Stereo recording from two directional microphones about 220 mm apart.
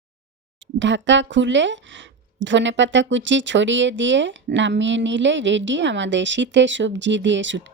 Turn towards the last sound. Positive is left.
turn(degrees=-55)  # may be behind; listen again after turning